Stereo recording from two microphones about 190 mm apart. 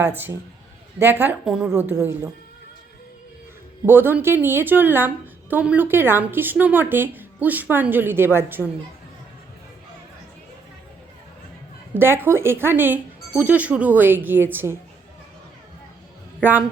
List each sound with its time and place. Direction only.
0.0 s a woman's voice: 10° right (ahead or behind)
3.8 s a woman's voice: 10° right (ahead or behind)
11.9 s a woman's voice: 10° right (ahead or behind)
16.4 s a woman's voice: 10° right (ahead or behind)